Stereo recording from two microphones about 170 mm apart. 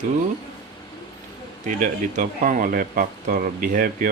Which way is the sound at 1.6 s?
50° right (ahead or behind).